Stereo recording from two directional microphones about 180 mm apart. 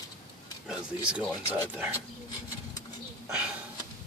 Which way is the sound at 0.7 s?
5° right (ahead or behind).